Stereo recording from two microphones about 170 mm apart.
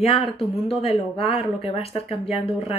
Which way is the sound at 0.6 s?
35° left (ahead or behind).